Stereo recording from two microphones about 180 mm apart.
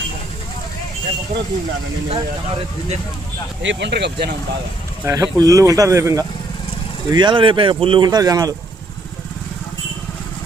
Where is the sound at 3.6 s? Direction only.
80° right; by 4.3 s 65° right (ahead or behind).